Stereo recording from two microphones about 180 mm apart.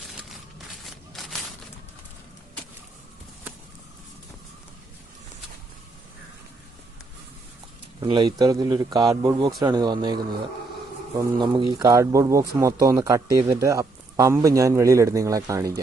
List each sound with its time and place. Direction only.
8.0 s speech: 25° right (ahead or behind)
11.3 s speech: 25° right (ahead or behind)